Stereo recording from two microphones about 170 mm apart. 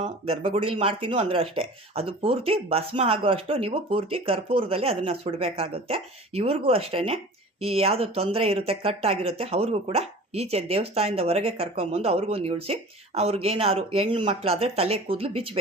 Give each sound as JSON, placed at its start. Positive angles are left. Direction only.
{"t": 0.0, "sound": "speech", "side_deg": -35}